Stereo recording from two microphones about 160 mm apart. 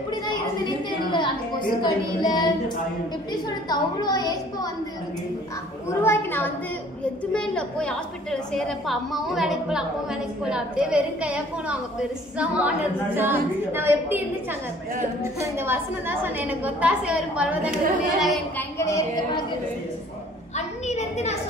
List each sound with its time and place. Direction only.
0.3 s a woman's voice: 30° left (ahead or behind)
3.6 s a woman's voice: 25° left (ahead or behind)
6.0 s a woman's voice: 15° left (ahead or behind); by 14.2 s 15° right (ahead or behind)
15.2 s a woman's voice: 15° right (ahead or behind)
18.6 s a woman's voice: 20° left (ahead or behind)
20.5 s a woman's voice: 45° left (ahead or behind)